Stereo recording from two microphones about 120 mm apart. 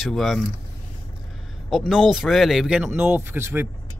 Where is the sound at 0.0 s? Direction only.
Centre (ahead or behind).